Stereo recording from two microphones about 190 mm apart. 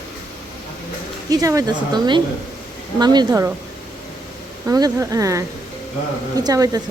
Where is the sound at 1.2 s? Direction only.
20° right (ahead or behind).